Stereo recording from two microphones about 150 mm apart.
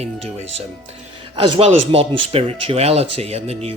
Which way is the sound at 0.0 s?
45° right (ahead or behind).